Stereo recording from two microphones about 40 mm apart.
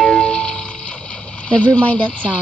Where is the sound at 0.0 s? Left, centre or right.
Centre.